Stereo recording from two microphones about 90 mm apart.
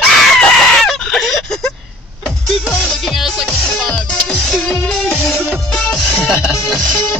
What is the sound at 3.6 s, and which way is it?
Music, 5° left (ahead or behind).